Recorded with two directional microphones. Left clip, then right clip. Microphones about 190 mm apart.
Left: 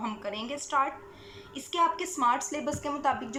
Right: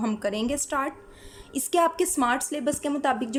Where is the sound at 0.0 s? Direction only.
65° right (ahead or behind).